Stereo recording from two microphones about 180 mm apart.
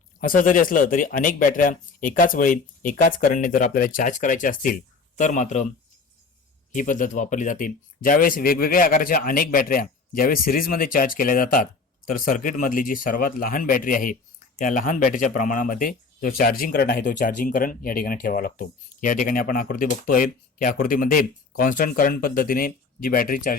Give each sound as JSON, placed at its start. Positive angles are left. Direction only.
{"t": 0.2, "sound": "speech", "side_deg": 50}
{"t": 6.7, "sound": "speech", "side_deg": 45}